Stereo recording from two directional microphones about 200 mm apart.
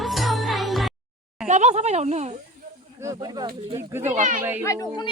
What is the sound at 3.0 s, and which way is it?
Speech, 20° right (ahead or behind).